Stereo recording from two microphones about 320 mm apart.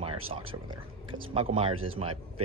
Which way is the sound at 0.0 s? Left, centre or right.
Centre.